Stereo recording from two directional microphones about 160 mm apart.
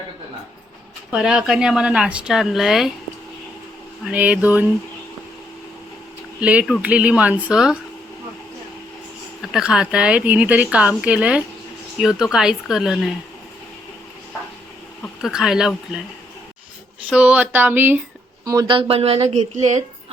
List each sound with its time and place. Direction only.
1.1 s speech: 5° right (ahead or behind)
4.0 s speech: 10° right (ahead or behind)
6.4 s speech: 10° right (ahead or behind)
9.4 s speech: 5° right (ahead or behind)
15.2 s speech: 5° right (ahead or behind)
17.1 s speech: 10° right (ahead or behind)
18.8 s a woman's voice: 35° right (ahead or behind)